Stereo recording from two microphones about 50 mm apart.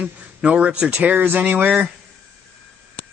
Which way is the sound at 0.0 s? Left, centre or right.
Right.